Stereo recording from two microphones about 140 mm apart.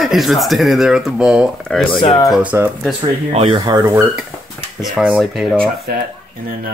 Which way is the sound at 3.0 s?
40° right (ahead or behind).